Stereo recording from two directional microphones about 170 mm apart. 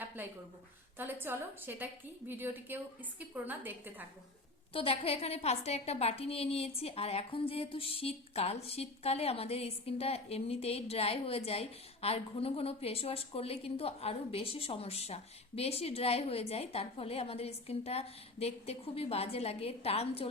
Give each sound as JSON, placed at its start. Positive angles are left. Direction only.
{"t": 0.2, "sound": "a woman's voice", "side_deg": -10}
{"t": 4.7, "sound": "a woman's voice", "side_deg": 35}